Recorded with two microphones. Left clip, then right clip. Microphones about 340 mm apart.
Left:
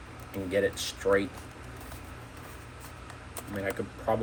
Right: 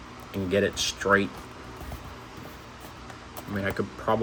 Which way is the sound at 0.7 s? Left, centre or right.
Right.